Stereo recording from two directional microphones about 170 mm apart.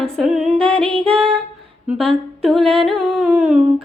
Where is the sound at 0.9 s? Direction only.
30° right (ahead or behind).